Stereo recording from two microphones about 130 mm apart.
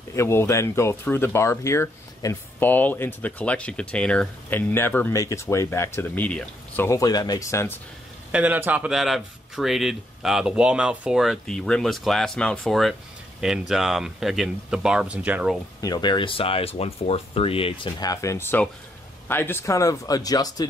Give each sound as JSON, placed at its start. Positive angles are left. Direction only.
{"t": 0.1, "sound": "speech", "side_deg": 20}
{"t": 6.9, "sound": "speech", "side_deg": 30}
{"t": 8.3, "sound": "speech", "side_deg": -10}
{"t": 8.9, "sound": "speech", "side_deg": 0}
{"t": 15.8, "sound": "speech", "side_deg": 35}
{"t": 18.0, "sound": "speech", "side_deg": 25}